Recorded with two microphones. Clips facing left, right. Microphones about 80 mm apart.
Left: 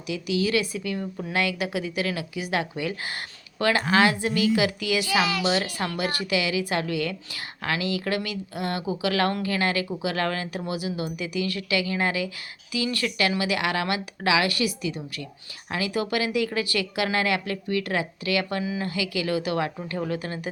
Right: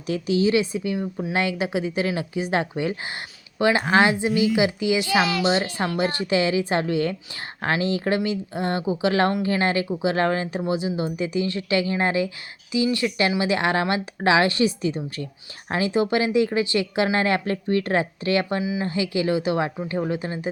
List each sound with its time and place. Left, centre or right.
0.1 s a woman's voice: right
3.8 s a woman's voice: right
4.1 s a woman's voice: right
18.6 s speech: centre
18.9 s a woman's voice: right